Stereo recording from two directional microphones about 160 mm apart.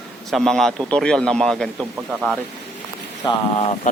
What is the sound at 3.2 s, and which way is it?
Speech, 35° left (ahead or behind).